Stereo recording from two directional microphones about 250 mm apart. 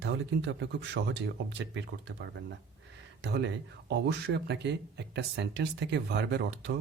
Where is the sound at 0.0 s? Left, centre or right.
Right.